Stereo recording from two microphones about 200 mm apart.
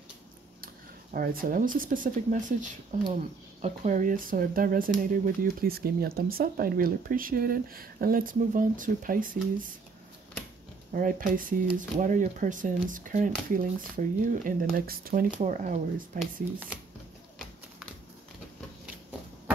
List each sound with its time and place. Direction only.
1.1 s speech: 45° right (ahead or behind)
10.9 s speech: 40° right (ahead or behind)